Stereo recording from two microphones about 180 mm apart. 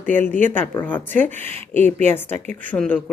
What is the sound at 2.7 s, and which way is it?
Speech, 5° left (ahead or behind).